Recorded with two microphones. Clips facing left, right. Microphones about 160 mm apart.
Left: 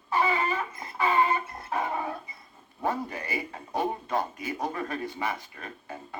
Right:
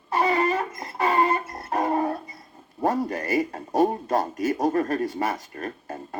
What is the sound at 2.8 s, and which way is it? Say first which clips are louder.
A man's voice: right 6 dB; 40° right (ahead or behind).